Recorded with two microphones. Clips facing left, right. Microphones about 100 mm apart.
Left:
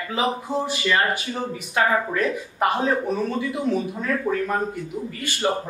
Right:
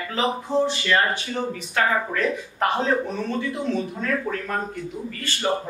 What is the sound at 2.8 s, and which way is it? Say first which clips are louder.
A man's voice: left 1 dB; 10° left (ahead or behind).